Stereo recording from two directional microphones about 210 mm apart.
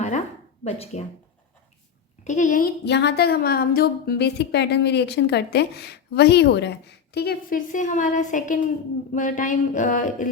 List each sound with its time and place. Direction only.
0.6 s speech: 30° left (ahead or behind)
2.2 s speech: 35° left (ahead or behind)